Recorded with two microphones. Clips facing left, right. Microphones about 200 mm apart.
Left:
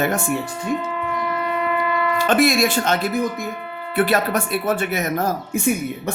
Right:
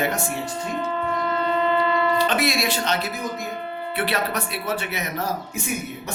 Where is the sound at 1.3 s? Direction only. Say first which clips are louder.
Right 2 dB; 25° right (ahead or behind).